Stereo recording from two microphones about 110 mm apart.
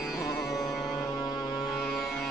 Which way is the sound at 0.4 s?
35° left (ahead or behind).